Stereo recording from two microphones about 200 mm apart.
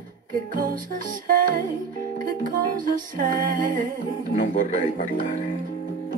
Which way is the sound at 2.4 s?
45° right (ahead or behind).